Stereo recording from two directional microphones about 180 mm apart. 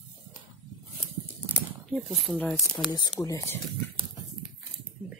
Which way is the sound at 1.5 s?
Centre (ahead or behind).